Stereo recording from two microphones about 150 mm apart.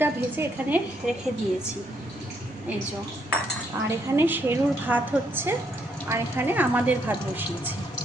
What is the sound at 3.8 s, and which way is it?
A woman's voice, 15° right (ahead or behind).